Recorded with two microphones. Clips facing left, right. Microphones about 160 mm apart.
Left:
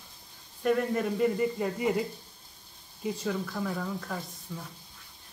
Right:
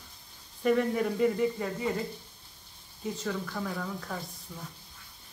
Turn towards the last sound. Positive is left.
turn(degrees=0)  # may be behind; listen again after turning